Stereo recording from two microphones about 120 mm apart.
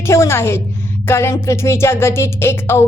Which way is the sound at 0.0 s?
20° left (ahead or behind).